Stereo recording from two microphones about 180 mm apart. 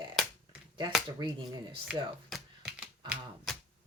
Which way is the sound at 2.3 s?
Centre (ahead or behind).